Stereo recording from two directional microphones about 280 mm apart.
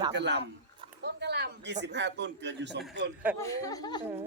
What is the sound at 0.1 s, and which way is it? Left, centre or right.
Speech, right.